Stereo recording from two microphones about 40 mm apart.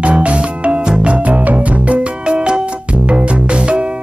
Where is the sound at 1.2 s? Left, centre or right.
Right.